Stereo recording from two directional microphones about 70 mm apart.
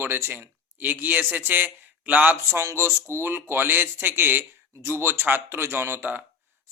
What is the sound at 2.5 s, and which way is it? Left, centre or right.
A man's voice, right.